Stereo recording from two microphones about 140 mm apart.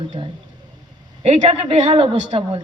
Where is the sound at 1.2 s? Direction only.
50° right (ahead or behind).